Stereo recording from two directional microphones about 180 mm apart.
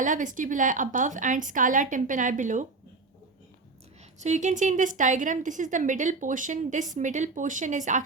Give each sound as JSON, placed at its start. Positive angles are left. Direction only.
{"t": 0.0, "sound": "a woman's voice", "side_deg": -45}
{"t": 4.2, "sound": "a woman's voice", "side_deg": -40}